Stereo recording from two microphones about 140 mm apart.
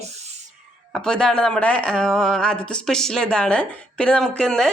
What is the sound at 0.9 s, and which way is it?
Speech, 5° left (ahead or behind).